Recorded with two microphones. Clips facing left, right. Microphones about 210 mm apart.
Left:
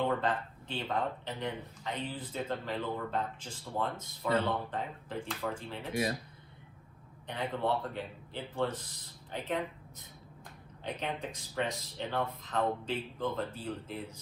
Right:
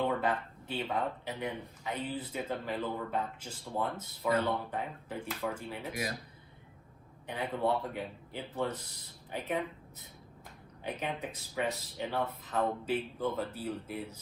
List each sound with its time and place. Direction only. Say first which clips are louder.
0.0 s speech: even; 10° right (ahead or behind)
5.9 s speech: left 6 dB; 30° left (ahead or behind)
7.3 s speech: right 1 dB; 10° right (ahead or behind)
10.8 s speech: even; 10° right (ahead or behind)